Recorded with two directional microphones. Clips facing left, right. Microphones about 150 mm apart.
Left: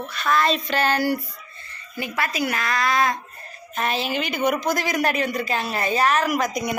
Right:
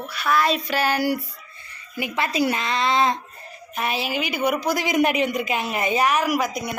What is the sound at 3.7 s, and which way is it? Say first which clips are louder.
A woman's voice: left 1 dB; 10° right (ahead or behind).